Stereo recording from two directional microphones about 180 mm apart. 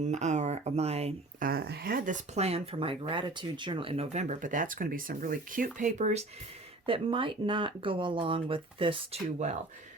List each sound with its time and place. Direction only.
0.0 s speech: 40° right (ahead or behind)
1.4 s speech: 60° right (ahead or behind); by 6.2 s 40° right (ahead or behind)
6.8 s speech: 30° right (ahead or behind)